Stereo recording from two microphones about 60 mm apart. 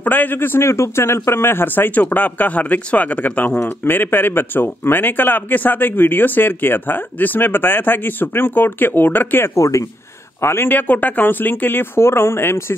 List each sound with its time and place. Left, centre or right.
0.0 s speech: left
9.6 s speech: left
10.4 s a man's voice: left
10.7 s speech: left